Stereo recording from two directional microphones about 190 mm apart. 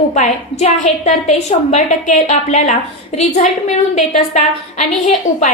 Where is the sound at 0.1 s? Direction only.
40° left (ahead or behind).